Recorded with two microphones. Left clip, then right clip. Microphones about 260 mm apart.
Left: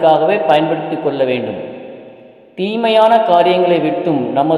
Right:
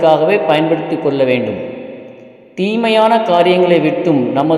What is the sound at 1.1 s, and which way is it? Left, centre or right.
Speech, right.